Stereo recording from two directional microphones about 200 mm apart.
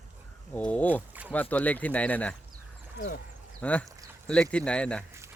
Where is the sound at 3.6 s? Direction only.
5° left (ahead or behind).